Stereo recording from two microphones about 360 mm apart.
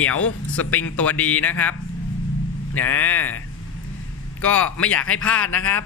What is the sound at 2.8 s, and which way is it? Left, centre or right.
Speech, centre.